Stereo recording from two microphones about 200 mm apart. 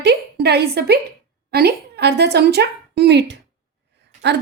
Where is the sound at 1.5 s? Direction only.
50° right (ahead or behind).